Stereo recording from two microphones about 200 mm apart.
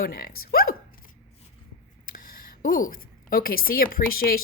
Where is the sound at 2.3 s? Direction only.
45° left (ahead or behind).